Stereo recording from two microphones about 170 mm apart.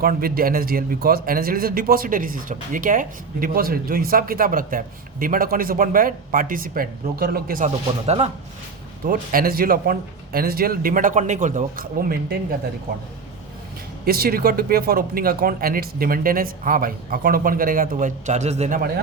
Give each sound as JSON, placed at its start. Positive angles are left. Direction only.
{"t": 0.0, "sound": "speech", "side_deg": -60}
{"t": 8.0, "sound": "speech", "side_deg": -40}
{"t": 9.0, "sound": "speech", "side_deg": -60}
{"t": 14.0, "sound": "speech", "side_deg": -65}